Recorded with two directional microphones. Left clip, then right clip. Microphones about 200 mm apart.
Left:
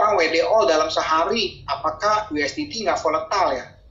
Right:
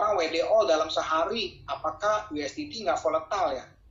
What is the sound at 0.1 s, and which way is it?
Speech, 90° left.